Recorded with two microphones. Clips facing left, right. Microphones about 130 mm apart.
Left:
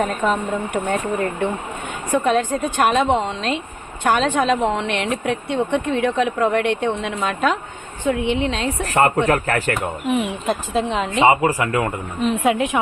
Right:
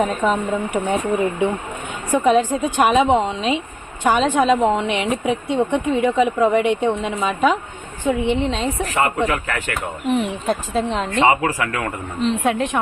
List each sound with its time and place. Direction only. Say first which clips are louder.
0.3 s a woman's voice: right 1 dB; 10° right (ahead or behind)
8.9 s speech: left 5 dB; 40° left (ahead or behind)
10.1 s a woman's voice: right 2 dB; 5° left (ahead or behind)
11.3 s speech: left 2 dB; 15° left (ahead or behind)
12.2 s a woman's voice: left 1 dB; 5° left (ahead or behind)